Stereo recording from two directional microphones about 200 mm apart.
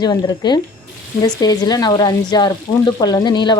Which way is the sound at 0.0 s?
20° left (ahead or behind).